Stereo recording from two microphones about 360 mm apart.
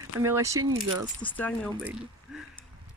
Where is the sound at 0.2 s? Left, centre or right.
Centre.